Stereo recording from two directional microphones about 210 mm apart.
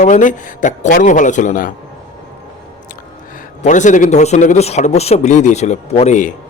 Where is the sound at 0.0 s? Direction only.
35° left (ahead or behind).